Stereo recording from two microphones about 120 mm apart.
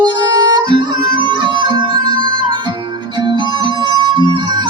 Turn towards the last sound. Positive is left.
turn(degrees=-40)  # may be behind; listen again after turning